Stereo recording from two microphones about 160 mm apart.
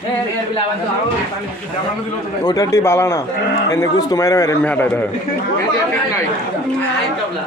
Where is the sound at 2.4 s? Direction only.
25° left (ahead or behind).